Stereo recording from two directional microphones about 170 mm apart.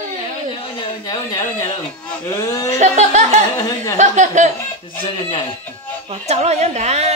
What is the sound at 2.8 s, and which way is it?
Speech, 45° right (ahead or behind).